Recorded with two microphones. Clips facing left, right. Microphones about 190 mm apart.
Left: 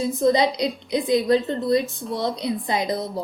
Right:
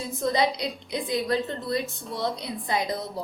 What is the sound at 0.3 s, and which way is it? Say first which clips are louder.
A woman's voice: left 4 dB; 15° left (ahead or behind).